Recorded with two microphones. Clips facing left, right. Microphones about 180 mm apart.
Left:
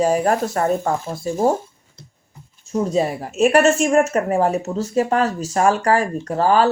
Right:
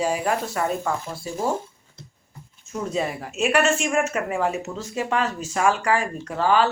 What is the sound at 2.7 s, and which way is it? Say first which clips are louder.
A woman's voice: left 7 dB; 35° left (ahead or behind).